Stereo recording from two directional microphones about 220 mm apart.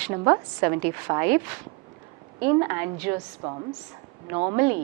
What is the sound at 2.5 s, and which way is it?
A woman's voice, 15° right (ahead or behind).